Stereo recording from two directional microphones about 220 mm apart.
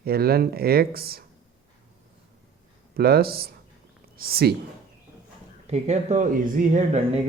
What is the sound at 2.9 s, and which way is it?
Speech, 45° right (ahead or behind).